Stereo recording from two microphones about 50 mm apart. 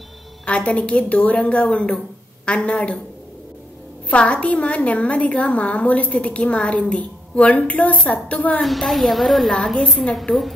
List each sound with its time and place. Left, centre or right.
0.5 s a woman's voice: left
4.1 s a woman's voice: left
8.6 s a woman's voice: centre